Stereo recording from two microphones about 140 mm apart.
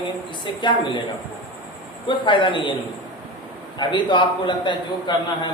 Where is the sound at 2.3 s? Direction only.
35° left (ahead or behind).